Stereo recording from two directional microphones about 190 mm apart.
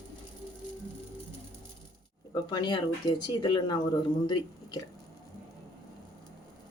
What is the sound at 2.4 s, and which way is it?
Speech, 25° left (ahead or behind).